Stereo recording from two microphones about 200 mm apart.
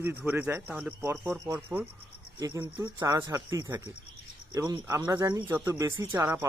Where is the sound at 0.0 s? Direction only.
10° right (ahead or behind).